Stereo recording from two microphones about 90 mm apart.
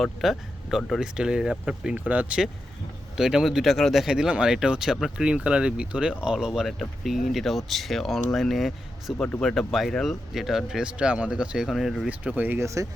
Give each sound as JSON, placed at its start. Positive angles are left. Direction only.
{"t": 0.0, "sound": "speech", "side_deg": 0}
{"t": 9.1, "sound": "speech", "side_deg": 10}
{"t": 12.0, "sound": "speech", "side_deg": -15}
{"t": 12.5, "sound": "speech", "side_deg": -35}